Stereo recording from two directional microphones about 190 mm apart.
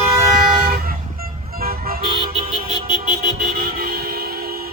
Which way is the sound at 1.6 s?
50° right (ahead or behind).